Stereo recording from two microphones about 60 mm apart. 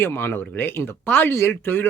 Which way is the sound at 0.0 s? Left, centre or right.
Left.